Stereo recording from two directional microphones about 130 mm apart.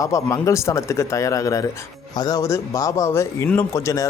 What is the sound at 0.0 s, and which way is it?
A man's voice, 25° left (ahead or behind).